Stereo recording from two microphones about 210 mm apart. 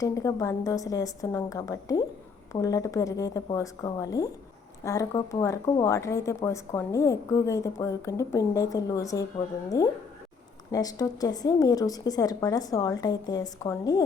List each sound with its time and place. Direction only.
0.0 s speech: 15° left (ahead or behind)